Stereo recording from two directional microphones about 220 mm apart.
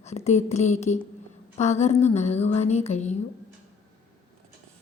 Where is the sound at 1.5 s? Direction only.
30° left (ahead or behind).